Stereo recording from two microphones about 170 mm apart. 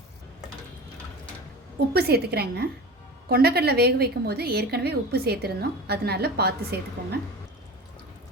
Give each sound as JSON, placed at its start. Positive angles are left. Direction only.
{"t": 1.9, "sound": "a woman's voice", "side_deg": -65}